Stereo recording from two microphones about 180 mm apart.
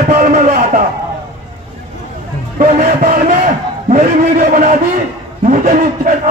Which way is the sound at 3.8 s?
50° right (ahead or behind).